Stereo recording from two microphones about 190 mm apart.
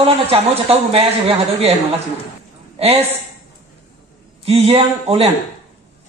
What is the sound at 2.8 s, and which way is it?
Speech, 30° right (ahead or behind).